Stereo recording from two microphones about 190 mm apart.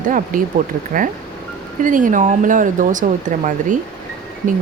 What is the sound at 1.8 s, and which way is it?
Speech, 45° right (ahead or behind).